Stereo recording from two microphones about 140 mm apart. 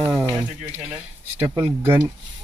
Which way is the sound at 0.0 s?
10° right (ahead or behind).